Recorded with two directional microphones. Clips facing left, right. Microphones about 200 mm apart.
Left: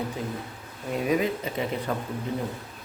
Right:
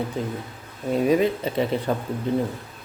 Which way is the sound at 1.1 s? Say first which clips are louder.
Right 5 dB; 30° right (ahead or behind).